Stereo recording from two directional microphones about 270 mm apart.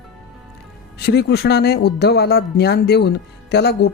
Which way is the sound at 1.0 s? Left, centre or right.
Left.